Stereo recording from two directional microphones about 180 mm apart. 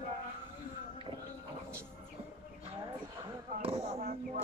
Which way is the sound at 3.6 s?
35° right (ahead or behind).